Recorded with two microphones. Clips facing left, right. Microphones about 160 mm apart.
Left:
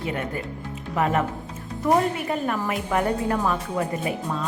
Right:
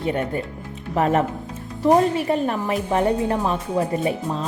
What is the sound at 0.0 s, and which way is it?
Speech, 35° right (ahead or behind).